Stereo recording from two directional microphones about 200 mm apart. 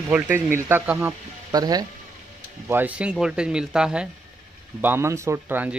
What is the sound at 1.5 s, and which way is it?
Speech, 20° right (ahead or behind).